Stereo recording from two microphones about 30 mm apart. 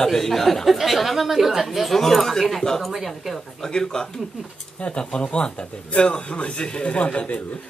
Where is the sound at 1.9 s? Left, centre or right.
Centre.